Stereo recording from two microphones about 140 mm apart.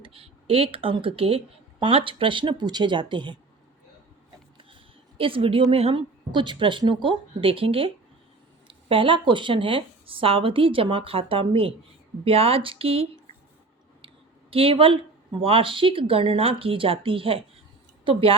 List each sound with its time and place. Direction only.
0.0 s speech: 40° right (ahead or behind)
4.5 s a sound: 40° right (ahead or behind)
5.7 s speech: 40° right (ahead or behind)
14.5 s a woman's voice: 40° right (ahead or behind)